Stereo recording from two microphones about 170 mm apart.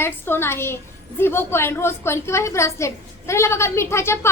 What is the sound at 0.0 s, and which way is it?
A woman's voice, 15° left (ahead or behind).